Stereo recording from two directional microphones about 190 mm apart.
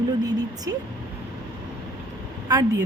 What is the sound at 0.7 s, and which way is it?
Speech, 15° right (ahead or behind).